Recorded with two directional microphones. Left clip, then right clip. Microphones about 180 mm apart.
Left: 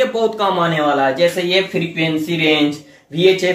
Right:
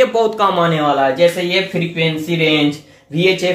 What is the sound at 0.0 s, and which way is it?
Speech, 25° right (ahead or behind).